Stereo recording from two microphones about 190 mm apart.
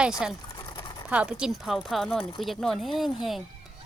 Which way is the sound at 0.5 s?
20° left (ahead or behind).